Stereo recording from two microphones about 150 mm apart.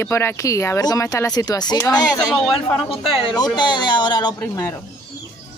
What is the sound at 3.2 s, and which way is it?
Speech, 30° left (ahead or behind).